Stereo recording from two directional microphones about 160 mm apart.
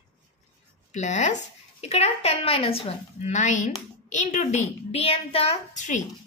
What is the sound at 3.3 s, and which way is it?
A woman's voice, 50° left (ahead or behind).